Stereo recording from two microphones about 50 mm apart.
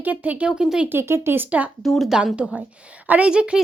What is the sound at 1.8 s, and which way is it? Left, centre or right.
Speech, centre.